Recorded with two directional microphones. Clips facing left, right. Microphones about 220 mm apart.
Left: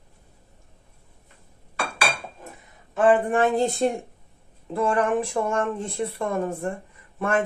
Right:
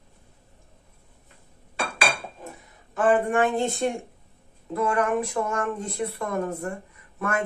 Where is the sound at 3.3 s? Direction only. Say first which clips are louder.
Left 2 dB; 35° left (ahead or behind).